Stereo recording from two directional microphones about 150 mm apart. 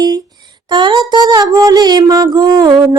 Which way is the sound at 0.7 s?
30° right (ahead or behind).